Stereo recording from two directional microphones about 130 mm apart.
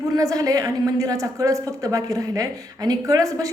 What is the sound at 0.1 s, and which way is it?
A woman's voice, 25° right (ahead or behind).